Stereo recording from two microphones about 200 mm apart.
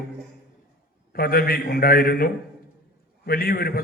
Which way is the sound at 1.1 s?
50° left (ahead or behind).